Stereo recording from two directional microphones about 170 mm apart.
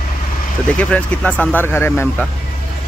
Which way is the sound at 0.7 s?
5° left (ahead or behind).